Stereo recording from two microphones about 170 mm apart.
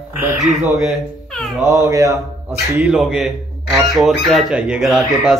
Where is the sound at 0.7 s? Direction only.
Centre (ahead or behind).